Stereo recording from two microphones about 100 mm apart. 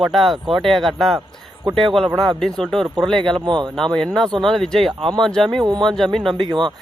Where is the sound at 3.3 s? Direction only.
50° right (ahead or behind).